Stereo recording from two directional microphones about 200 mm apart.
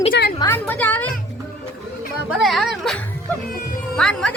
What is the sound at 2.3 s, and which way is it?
Speech, centre (ahead or behind).